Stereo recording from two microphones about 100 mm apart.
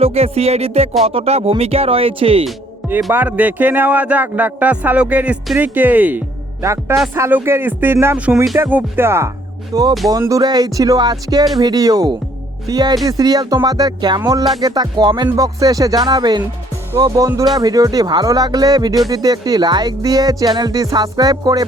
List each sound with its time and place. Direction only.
0.0 s music: 90° right
1.0 s speech: 90° right; by 2.5 s 70° right (ahead or behind)
3.1 s speech: 20° right (ahead or behind)
6.6 s speech: 30° right (ahead or behind)
9.7 s speech: 35° right (ahead or behind)
14.6 s music: 45° right (ahead or behind)
15.4 s speech: 35° right (ahead or behind)